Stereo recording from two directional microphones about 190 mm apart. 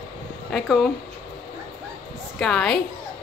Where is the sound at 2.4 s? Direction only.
5° left (ahead or behind).